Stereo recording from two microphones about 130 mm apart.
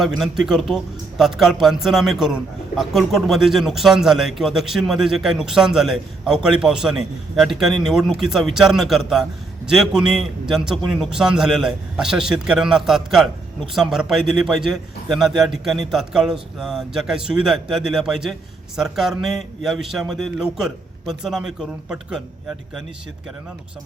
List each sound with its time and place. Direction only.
0.0 s a man's voice: centre (ahead or behind)